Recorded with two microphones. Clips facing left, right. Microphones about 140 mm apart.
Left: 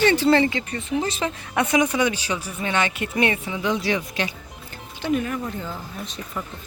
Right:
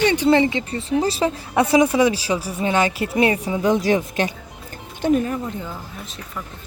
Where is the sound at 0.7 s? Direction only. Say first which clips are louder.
Right 4 dB; 30° right (ahead or behind); by 4.4 s 45° right (ahead or behind).